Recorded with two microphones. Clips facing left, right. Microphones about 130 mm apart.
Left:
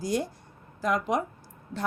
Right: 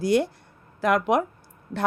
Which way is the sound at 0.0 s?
70° right (ahead or behind).